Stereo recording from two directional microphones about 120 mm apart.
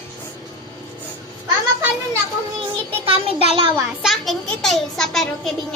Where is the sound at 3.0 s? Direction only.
50° right (ahead or behind).